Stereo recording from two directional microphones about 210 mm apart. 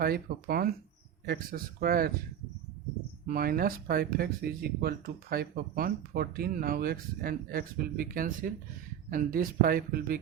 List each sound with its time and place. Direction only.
0.0 s speech: 45° right (ahead or behind)
3.2 s speech: 45° right (ahead or behind)